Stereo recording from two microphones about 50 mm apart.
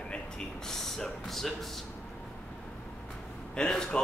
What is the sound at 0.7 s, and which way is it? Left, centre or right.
Speech, centre.